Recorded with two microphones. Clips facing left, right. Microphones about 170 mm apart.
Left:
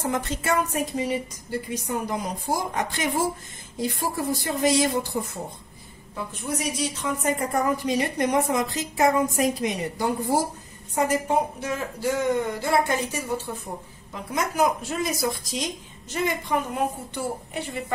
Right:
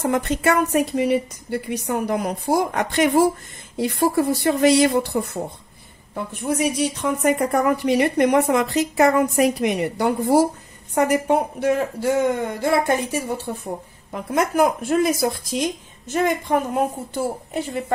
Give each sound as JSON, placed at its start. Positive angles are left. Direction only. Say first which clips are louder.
{"t": 0.0, "sound": "a woman's voice", "louder": "right 7 dB", "side_deg": -60}